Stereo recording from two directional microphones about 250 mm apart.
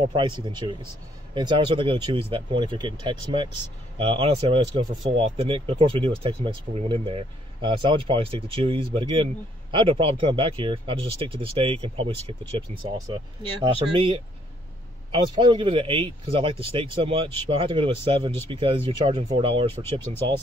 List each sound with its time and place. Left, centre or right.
0.1 s speech: centre